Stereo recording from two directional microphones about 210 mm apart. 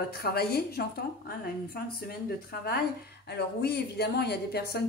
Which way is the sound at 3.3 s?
50° left (ahead or behind).